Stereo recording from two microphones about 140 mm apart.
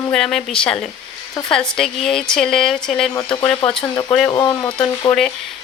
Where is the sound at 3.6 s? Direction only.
35° left (ahead or behind).